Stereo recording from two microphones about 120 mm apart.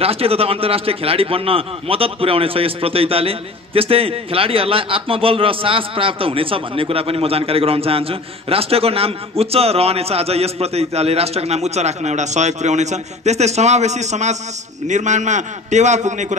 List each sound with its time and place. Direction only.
0.0 s a man's voice: 55° right (ahead or behind); by 14.3 s 75° right (ahead or behind)
14.9 s a man's voice: 85° right